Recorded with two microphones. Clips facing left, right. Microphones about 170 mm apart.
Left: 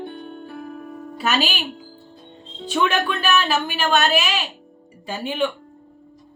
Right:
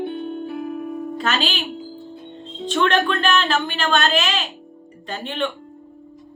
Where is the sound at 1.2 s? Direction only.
10° left (ahead or behind).